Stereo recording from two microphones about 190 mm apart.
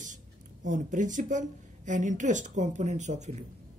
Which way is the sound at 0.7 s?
40° right (ahead or behind).